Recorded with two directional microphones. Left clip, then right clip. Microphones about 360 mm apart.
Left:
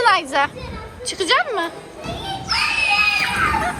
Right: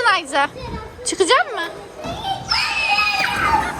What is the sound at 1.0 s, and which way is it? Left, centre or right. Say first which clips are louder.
Speech: right 2 dB; centre.